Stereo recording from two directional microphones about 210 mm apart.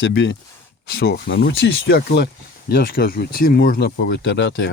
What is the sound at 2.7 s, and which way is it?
Speech, 45° left (ahead or behind).